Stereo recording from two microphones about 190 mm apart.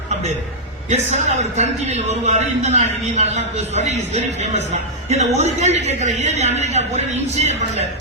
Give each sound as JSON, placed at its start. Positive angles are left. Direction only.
{"t": 0.9, "sound": "a man's voice", "side_deg": -35}